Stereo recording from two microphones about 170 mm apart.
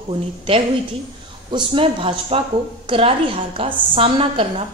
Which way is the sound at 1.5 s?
30° right (ahead or behind).